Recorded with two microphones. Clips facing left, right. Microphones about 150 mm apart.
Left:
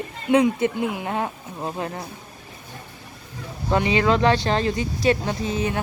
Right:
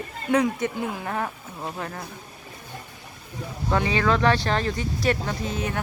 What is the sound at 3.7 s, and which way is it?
Speech, 20° left (ahead or behind).